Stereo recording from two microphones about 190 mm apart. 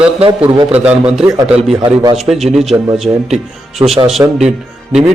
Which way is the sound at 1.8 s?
20° right (ahead or behind).